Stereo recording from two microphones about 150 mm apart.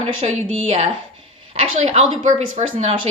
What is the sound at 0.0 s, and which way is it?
A woman's voice, 40° right (ahead or behind).